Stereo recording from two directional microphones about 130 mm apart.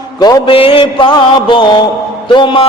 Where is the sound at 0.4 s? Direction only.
45° left (ahead or behind).